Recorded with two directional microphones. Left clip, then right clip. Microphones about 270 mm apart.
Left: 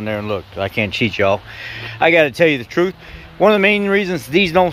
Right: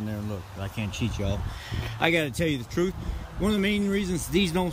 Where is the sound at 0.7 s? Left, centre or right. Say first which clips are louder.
Left 17 dB; centre.